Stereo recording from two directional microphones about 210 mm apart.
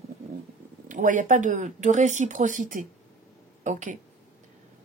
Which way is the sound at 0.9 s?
40° right (ahead or behind).